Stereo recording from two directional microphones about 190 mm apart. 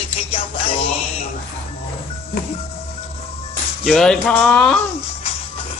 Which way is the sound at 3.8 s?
Centre (ahead or behind).